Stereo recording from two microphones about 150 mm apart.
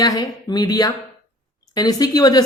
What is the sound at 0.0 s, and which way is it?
A woman's voice, 25° left (ahead or behind).